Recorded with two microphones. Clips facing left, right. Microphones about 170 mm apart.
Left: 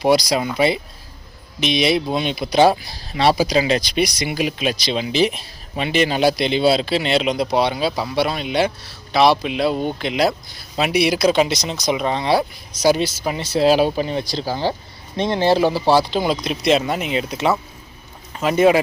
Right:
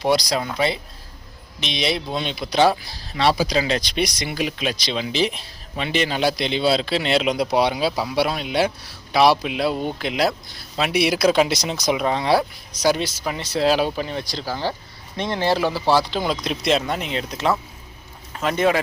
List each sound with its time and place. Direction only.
0.0 s speech: 5° left (ahead or behind)
13.2 s speech: 25° left (ahead or behind)
13.6 s speech: 10° left (ahead or behind)
13.9 s speech: 25° left (ahead or behind)